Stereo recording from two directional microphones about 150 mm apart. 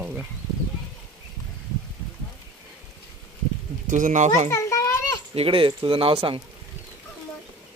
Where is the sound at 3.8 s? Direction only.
60° right (ahead or behind).